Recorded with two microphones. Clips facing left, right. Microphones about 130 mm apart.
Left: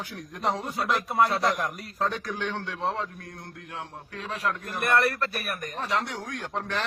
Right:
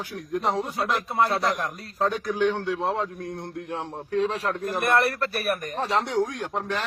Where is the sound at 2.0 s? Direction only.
5° right (ahead or behind).